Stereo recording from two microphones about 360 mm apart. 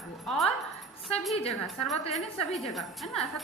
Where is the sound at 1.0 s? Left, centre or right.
Centre.